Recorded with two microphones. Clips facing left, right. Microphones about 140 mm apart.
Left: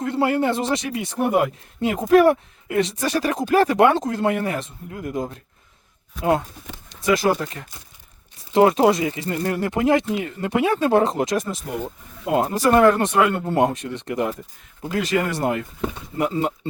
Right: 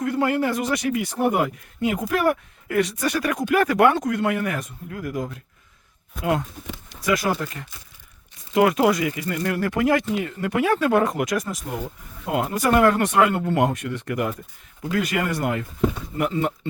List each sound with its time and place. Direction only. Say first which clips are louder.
0.0 s speech: left 1 dB; 30° left (ahead or behind)
6.9 s speech: left 3 dB; 25° left (ahead or behind)